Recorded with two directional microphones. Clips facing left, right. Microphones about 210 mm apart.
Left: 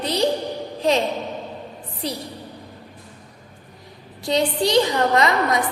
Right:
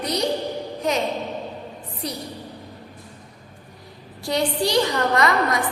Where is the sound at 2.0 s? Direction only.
30° left (ahead or behind).